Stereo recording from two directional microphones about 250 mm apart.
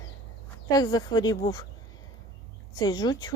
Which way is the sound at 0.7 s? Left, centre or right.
Centre.